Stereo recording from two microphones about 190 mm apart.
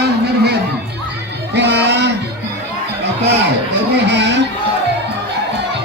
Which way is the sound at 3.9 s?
65° right (ahead or behind).